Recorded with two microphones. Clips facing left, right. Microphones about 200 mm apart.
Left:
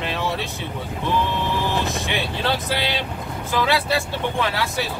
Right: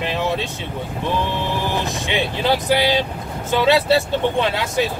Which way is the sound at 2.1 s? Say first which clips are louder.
Right 4 dB; 20° right (ahead or behind).